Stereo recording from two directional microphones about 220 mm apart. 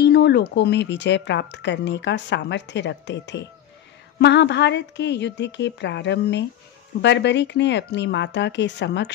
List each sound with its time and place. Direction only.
0.0 s speech: 50° left (ahead or behind)